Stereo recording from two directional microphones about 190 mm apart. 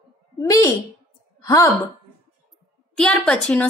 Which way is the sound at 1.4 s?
20° left (ahead or behind).